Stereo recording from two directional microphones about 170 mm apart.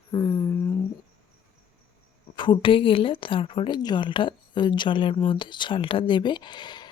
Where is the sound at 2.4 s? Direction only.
30° left (ahead or behind).